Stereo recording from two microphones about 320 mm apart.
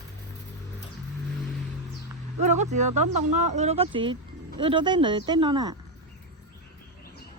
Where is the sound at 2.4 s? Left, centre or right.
Right.